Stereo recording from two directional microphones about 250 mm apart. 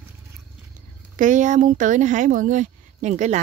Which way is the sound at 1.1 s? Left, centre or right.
Right.